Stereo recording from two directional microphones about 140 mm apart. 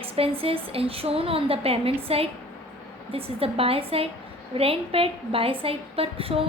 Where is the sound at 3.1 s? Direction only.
45° right (ahead or behind).